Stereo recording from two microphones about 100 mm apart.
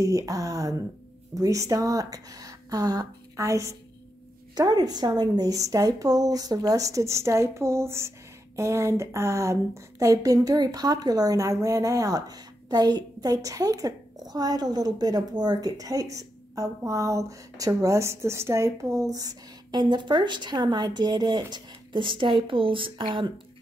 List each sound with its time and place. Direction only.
0.0 s a woman's voice: 35° right (ahead or behind); by 23.3 s 50° right (ahead or behind)